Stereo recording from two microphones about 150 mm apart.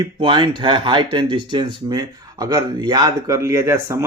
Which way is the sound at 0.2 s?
35° right (ahead or behind).